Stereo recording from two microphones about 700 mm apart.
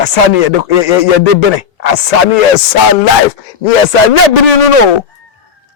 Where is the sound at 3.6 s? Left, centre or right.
Left.